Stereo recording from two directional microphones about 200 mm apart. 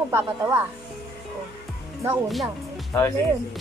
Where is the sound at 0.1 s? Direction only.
10° right (ahead or behind).